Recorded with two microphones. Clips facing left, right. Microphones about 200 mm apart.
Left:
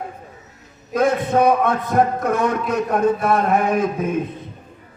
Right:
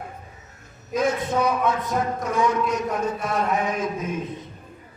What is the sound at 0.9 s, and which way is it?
A man's voice, 55° left (ahead or behind).